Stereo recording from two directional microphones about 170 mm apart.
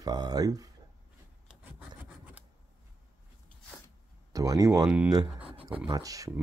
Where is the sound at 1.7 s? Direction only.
10° right (ahead or behind).